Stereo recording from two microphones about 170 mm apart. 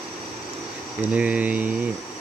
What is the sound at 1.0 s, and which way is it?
Speech, 10° right (ahead or behind).